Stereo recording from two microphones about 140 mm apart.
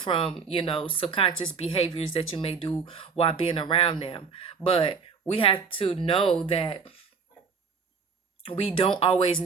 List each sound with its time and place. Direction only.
0.0 s speech: 40° left (ahead or behind)
8.4 s speech: 40° left (ahead or behind)